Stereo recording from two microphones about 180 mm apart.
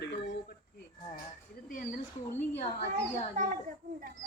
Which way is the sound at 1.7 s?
50° left (ahead or behind).